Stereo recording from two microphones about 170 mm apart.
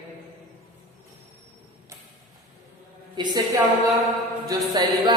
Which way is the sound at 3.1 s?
25° right (ahead or behind).